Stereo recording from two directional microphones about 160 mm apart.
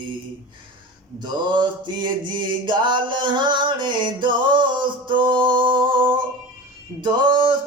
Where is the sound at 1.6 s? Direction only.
30° right (ahead or behind).